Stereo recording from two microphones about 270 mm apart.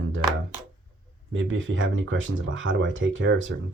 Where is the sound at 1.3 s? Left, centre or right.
Right.